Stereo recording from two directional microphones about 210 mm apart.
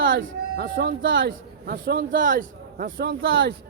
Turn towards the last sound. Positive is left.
turn(degrees=-65)  # may be behind; listen again after turning